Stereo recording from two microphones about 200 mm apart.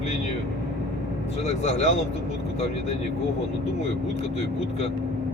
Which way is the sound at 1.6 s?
35° left (ahead or behind).